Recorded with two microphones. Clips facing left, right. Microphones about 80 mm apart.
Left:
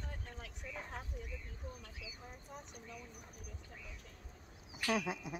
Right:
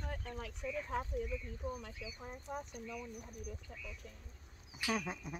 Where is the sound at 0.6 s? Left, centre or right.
Right.